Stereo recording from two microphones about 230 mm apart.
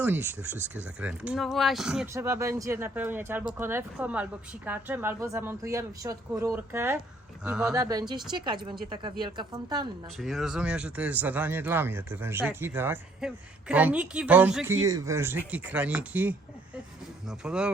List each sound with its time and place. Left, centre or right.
0.0 s speech: centre
2.1 s speech: centre
7.7 s speech: centre
10.2 s speech: centre